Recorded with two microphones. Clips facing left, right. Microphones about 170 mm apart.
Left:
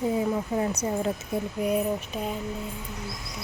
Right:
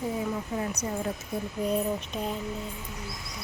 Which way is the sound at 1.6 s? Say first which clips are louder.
Left 1 dB; 10° left (ahead or behind).